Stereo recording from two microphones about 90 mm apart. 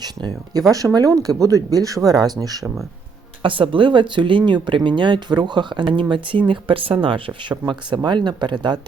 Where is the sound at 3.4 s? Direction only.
70° right (ahead or behind).